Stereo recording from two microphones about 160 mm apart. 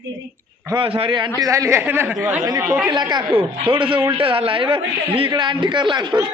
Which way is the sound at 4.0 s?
10° right (ahead or behind).